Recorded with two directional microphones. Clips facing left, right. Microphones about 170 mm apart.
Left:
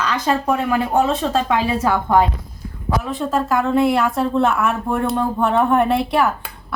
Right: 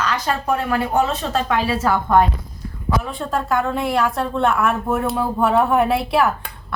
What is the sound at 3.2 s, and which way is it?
Speech, centre (ahead or behind).